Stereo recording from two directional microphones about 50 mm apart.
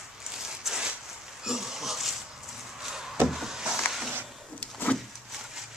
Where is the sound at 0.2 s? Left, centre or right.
Centre.